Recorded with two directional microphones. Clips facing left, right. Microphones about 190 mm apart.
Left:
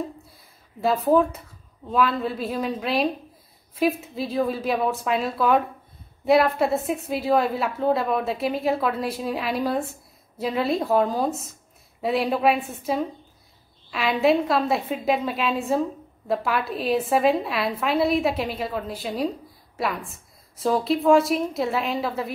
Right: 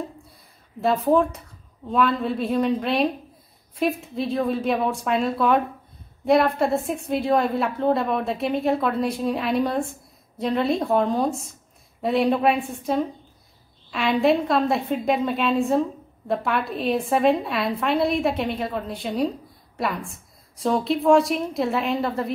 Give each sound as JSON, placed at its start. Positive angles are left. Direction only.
{"t": 0.7, "sound": "a woman's voice", "side_deg": 0}